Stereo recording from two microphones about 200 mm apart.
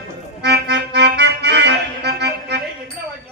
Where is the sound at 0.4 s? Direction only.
55° right (ahead or behind).